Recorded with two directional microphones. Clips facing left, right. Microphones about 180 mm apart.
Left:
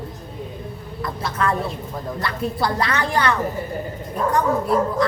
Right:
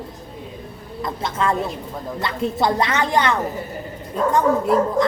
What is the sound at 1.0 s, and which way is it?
Speech, 20° right (ahead or behind).